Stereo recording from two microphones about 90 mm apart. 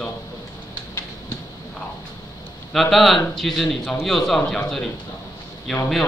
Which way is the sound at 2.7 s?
Centre (ahead or behind).